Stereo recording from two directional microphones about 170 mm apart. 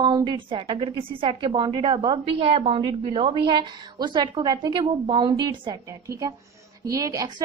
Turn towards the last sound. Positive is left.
turn(degrees=-20)  # may be behind; listen again after turning